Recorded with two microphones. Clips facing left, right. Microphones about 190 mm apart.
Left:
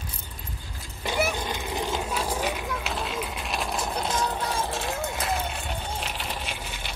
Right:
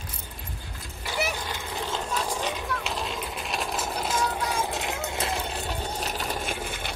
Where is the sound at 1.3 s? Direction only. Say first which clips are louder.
Left 3 dB; 20° left (ahead or behind).